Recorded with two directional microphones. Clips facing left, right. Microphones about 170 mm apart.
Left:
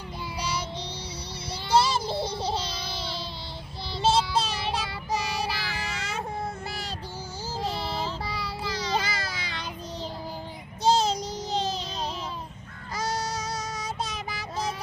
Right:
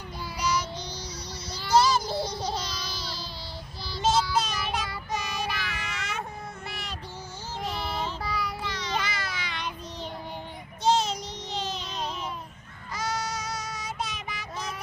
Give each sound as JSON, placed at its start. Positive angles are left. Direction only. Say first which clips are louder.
{"t": 0.3, "sound": "child singing", "louder": "right 4 dB", "side_deg": 30}
{"t": 1.6, "sound": "a sound", "louder": "right 1 dB", "side_deg": 30}
{"t": 3.8, "sound": "child singing", "louder": "left 1 dB", "side_deg": 25}
{"t": 10.8, "sound": "child singing", "louder": "left 2 dB", "side_deg": 35}